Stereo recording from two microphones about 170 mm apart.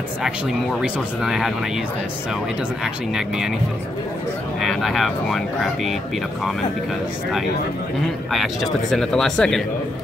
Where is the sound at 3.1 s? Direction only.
5° right (ahead or behind).